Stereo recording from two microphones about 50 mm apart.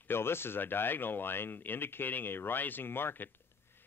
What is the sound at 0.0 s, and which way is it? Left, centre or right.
Speech, left.